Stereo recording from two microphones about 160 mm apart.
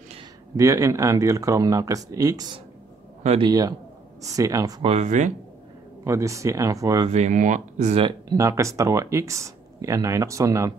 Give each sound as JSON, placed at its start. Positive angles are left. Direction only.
{"t": 0.6, "sound": "speech", "side_deg": -20}
{"t": 4.8, "sound": "speech", "side_deg": -45}
{"t": 6.0, "sound": "speech", "side_deg": -20}
{"t": 7.1, "sound": "speech", "side_deg": -45}
{"t": 8.0, "sound": "speech", "side_deg": -20}